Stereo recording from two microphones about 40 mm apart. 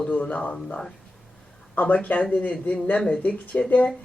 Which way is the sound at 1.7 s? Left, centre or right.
Left.